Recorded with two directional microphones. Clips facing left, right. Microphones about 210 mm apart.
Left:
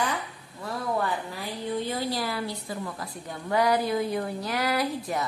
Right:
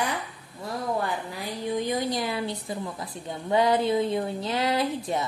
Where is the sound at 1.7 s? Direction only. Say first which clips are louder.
Right 3 dB; 15° right (ahead or behind).